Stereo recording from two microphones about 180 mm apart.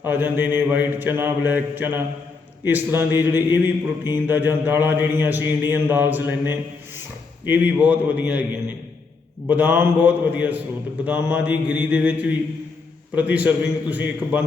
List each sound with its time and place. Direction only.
0.0 s speech: 10° right (ahead or behind)
9.5 s speech: 10° right (ahead or behind)